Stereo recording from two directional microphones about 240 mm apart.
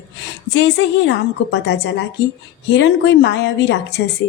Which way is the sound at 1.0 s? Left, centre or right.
Left.